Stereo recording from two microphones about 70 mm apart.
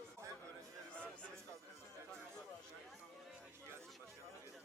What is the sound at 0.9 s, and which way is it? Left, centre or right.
Music, centre.